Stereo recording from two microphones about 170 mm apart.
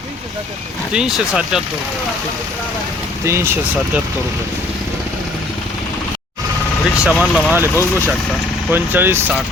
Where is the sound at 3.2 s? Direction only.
15° right (ahead or behind).